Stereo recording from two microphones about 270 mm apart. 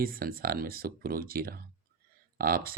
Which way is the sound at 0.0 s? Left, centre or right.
Right.